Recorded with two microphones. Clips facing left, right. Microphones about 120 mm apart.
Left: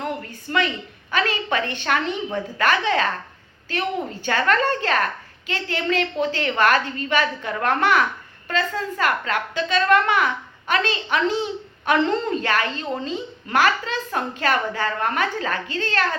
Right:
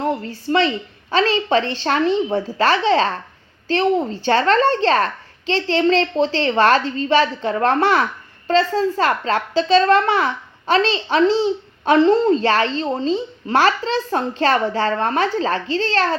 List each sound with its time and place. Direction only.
0.0 s a woman's voice: 30° right (ahead or behind)
12.4 s a woman's voice: 30° right (ahead or behind)